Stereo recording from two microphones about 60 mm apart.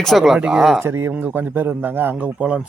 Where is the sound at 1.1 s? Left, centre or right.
Right.